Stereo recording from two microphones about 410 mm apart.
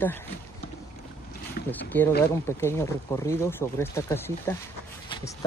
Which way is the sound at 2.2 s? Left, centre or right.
Centre.